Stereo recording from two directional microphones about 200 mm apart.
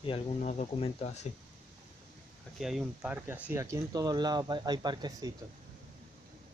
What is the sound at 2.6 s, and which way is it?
Speech, centre (ahead or behind).